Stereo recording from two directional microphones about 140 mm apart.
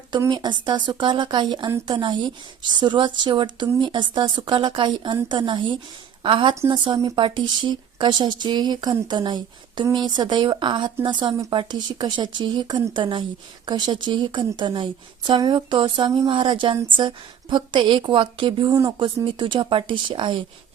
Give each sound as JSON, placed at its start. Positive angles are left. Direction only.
{"t": 0.3, "sound": "speech", "side_deg": -30}